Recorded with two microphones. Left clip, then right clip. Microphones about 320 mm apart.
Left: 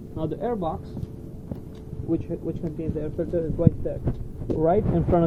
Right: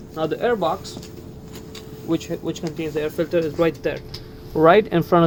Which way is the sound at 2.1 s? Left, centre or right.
Right.